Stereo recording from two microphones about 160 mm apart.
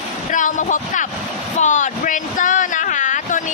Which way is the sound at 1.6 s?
50° left (ahead or behind).